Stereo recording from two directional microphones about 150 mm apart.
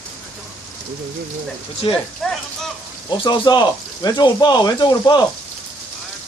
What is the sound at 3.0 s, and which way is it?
Speech, 30° left (ahead or behind).